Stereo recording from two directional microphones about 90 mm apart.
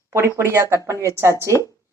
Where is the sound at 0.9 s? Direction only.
30° left (ahead or behind).